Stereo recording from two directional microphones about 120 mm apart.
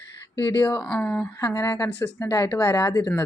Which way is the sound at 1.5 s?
25° left (ahead or behind).